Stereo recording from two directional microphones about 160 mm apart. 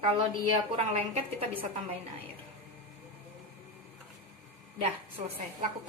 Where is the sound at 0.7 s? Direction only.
35° right (ahead or behind).